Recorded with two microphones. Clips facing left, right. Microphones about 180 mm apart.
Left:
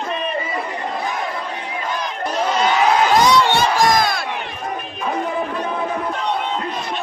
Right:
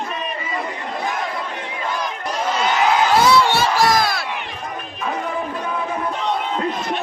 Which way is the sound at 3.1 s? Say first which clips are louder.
Even; 10° right (ahead or behind).